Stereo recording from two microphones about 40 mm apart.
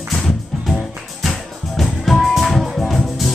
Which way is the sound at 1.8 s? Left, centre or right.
Centre.